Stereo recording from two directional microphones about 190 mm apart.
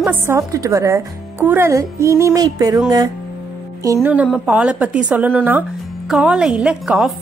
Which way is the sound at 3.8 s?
15° right (ahead or behind).